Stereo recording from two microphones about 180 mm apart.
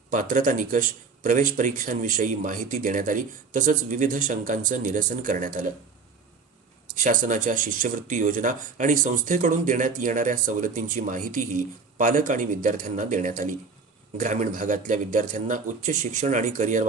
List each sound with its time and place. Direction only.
0.1 s speech: 45° right (ahead or behind)
6.9 s speech: 45° right (ahead or behind)